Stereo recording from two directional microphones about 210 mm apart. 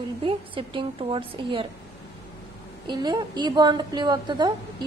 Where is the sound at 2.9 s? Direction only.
20° right (ahead or behind).